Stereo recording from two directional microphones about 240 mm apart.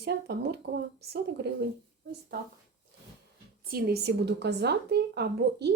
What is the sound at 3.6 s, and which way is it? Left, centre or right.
Speech, right.